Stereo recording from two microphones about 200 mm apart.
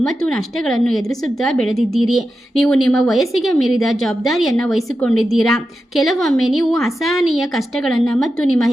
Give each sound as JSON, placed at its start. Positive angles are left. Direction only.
{"t": 0.0, "sound": "a woman's voice", "side_deg": 0}